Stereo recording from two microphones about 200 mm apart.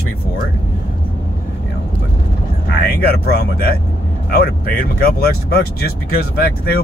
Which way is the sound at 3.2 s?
50° left (ahead or behind).